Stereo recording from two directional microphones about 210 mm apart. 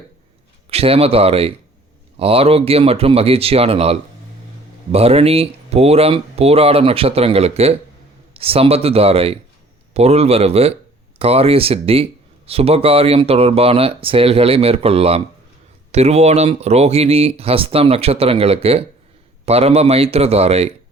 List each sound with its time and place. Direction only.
0.7 s speech: 30° right (ahead or behind)